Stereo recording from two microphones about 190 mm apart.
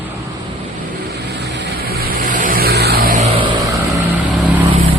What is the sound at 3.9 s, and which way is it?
Vehicle, 10° right (ahead or behind).